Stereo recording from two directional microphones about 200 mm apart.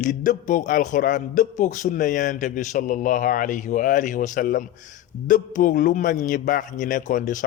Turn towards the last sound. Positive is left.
turn(degrees=40)  # may be behind; listen again after turning